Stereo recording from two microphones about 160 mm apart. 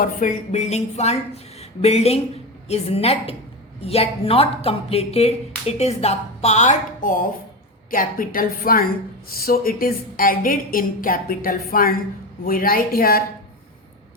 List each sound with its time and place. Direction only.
0.0 s a woman's voice: 55° left (ahead or behind)